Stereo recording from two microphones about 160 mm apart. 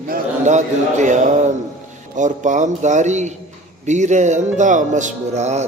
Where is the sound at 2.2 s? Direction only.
50° right (ahead or behind).